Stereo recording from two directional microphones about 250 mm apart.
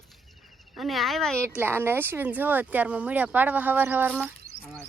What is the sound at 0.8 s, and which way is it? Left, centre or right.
Speech, centre.